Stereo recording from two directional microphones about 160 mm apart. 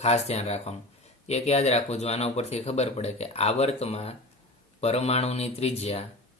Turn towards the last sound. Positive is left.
turn(degrees=40)  # may be behind; listen again after turning